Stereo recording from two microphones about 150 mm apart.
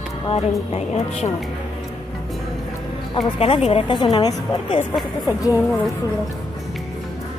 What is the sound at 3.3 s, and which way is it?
Speech, 40° left (ahead or behind).